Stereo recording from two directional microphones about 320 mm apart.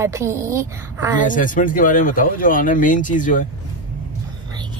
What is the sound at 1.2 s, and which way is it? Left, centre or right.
Speech, left.